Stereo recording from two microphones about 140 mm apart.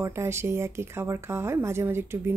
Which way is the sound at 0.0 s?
20° right (ahead or behind).